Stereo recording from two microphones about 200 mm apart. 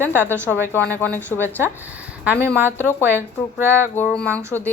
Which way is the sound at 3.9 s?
5° left (ahead or behind).